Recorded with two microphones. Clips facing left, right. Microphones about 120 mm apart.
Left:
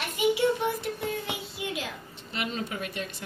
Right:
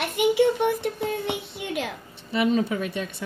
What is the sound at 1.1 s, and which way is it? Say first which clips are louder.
Child singing: right 5 dB; 60° right (ahead or behind).